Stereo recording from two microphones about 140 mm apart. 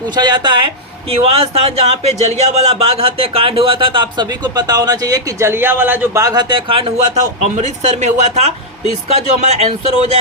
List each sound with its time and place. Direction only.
0.2 s speech: 30° right (ahead or behind)
1.1 s speech: 45° right (ahead or behind); by 6.2 s 15° right (ahead or behind)
6.2 s speech: 30° right (ahead or behind)
7.5 s speech: 55° right (ahead or behind)